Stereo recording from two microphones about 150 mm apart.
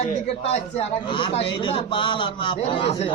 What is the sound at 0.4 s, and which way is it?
A man's voice, 45° left (ahead or behind).